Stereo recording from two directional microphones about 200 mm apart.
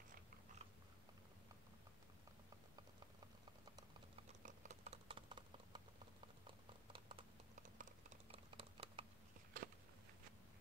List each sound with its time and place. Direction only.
4.4 s typing: 40° right (ahead or behind)
6.9 s typing: 25° right (ahead or behind)
7.5 s typing: 40° right (ahead or behind)
8.3 s typing: 25° right (ahead or behind)
9.5 s a sound: 45° right (ahead or behind)